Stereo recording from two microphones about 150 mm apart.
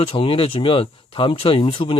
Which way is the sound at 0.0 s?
35° left (ahead or behind).